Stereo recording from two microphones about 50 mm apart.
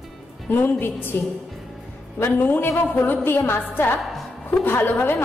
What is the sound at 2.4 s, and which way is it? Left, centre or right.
A woman's voice, left.